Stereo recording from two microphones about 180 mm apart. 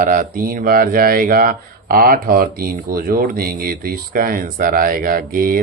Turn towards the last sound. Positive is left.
turn(degrees=-55)  # may be behind; listen again after turning